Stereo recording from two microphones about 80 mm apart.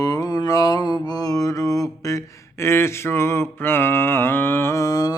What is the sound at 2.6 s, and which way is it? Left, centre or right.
Mantra, left.